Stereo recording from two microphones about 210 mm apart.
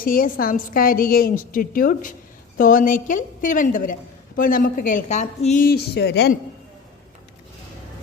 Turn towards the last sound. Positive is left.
turn(degrees=50)  # may be behind; listen again after turning